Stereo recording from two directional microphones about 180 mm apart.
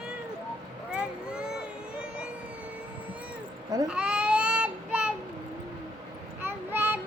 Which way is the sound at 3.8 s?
5° right (ahead or behind).